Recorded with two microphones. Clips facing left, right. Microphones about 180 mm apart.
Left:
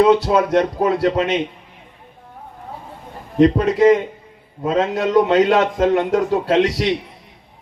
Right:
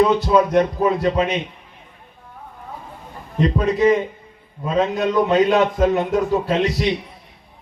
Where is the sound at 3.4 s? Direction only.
85° left.